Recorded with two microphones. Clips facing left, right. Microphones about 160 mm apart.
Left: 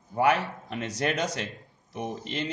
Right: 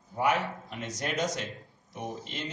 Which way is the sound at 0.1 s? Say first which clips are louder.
Left 4 dB; 75° left (ahead or behind).